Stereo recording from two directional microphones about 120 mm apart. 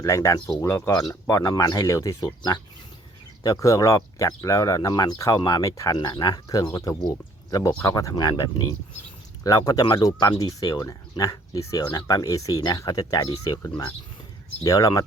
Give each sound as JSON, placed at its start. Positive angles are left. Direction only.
{"t": 0.0, "sound": "speech", "side_deg": 25}
{"t": 2.2, "sound": "speech", "side_deg": 40}
{"t": 14.6, "sound": "speech", "side_deg": 30}